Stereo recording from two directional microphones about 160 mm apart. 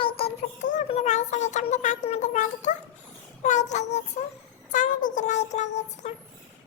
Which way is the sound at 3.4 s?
50° left (ahead or behind).